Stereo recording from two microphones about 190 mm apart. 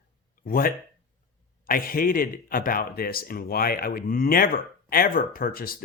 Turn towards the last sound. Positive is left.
turn(degrees=50)  # may be behind; listen again after turning